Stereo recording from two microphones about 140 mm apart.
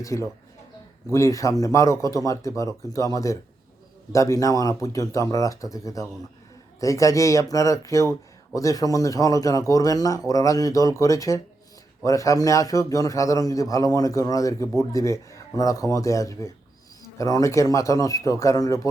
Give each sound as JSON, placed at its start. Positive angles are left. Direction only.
{"t": 0.0, "sound": "speech", "side_deg": 20}